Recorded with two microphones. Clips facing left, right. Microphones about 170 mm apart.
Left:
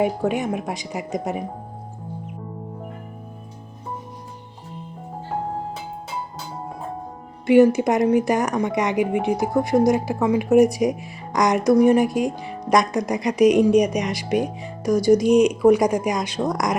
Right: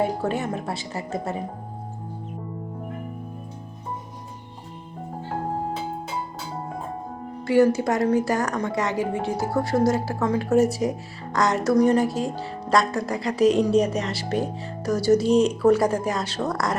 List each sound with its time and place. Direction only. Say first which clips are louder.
0.0 s speech: left 3 dB; 15° left (ahead or behind)
7.4 s speech: left 4 dB; 20° left (ahead or behind)